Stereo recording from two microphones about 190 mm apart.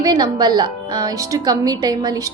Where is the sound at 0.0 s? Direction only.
20° right (ahead or behind).